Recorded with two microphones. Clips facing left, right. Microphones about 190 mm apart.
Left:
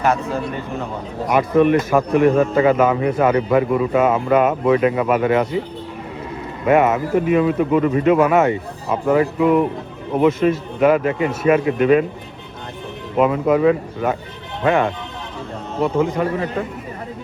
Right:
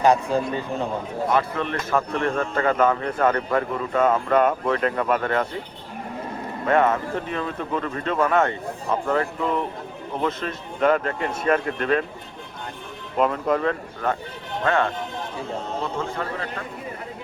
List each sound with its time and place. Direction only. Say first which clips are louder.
0.0 s a man's voice: right 1 dB; 15° right (ahead or behind)
1.3 s a man's voice: left 11 dB; 15° left (ahead or behind)
6.7 s a man's voice: left 5 dB; 10° left (ahead or behind)
13.1 s a man's voice: left 6 dB; 5° left (ahead or behind)